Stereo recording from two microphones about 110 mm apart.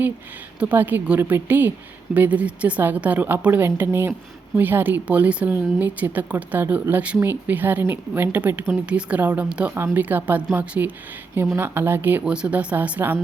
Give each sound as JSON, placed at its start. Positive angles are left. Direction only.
{"t": 0.6, "sound": "a woman's voice", "side_deg": -15}